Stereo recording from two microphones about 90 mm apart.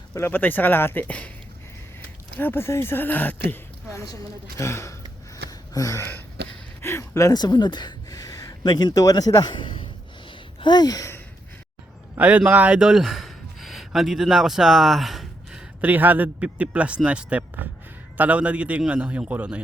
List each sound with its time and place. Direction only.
0.1 s speech: 25° left (ahead or behind)
2.4 s speech: 25° left (ahead or behind)
3.8 s a woman's voice: 35° left (ahead or behind)
5.5 s a sound: 40° left (ahead or behind)
6.8 s speech: 30° left (ahead or behind)
7.3 s a sound: 50° left (ahead or behind)
12.1 s a man's voice: 15° right (ahead or behind)
12.9 s a sound: 5° right (ahead or behind)
15.8 s speech: 20° right (ahead or behind)